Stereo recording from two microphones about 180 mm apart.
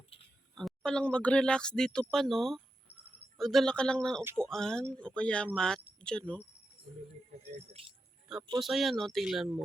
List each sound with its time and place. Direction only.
0.5 s speech: 5° left (ahead or behind)
7.8 s speech: 30° right (ahead or behind)
8.3 s speech: 5° right (ahead or behind)